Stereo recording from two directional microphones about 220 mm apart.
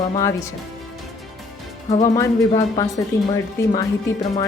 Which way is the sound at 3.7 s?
15° left (ahead or behind).